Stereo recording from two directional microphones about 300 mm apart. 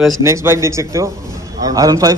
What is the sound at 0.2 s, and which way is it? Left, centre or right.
Speech, centre.